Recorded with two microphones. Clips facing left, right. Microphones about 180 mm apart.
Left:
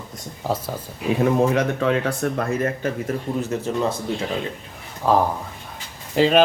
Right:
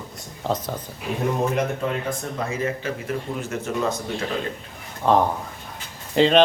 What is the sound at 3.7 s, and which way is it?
Speech, 30° left (ahead or behind).